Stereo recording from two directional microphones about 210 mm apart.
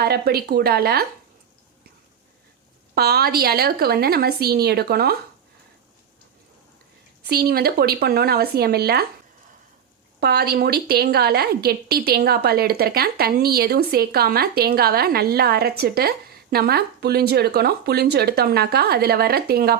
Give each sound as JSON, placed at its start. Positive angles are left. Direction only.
{"t": 0.0, "sound": "a woman's voice", "side_deg": -50}
{"t": 2.9, "sound": "a woman's voice", "side_deg": -50}
{"t": 7.3, "sound": "a woman's voice", "side_deg": -50}
{"t": 10.2, "sound": "a woman's voice", "side_deg": -50}